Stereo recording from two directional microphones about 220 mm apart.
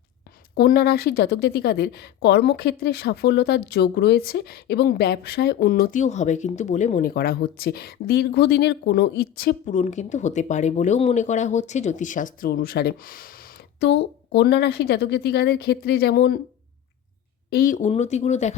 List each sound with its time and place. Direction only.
0.5 s a woman's voice: 45° left (ahead or behind)
13.7 s a woman's voice: 50° left (ahead or behind)
17.5 s speech: 40° left (ahead or behind)